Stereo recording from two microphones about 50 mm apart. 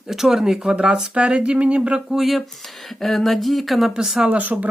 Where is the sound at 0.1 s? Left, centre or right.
Centre.